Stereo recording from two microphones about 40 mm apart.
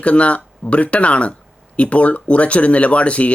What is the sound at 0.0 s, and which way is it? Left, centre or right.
Speech, left.